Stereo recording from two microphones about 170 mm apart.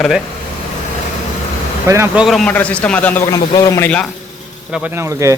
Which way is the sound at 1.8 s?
15° right (ahead or behind).